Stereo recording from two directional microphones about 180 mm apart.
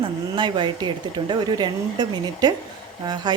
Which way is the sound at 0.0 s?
25° right (ahead or behind).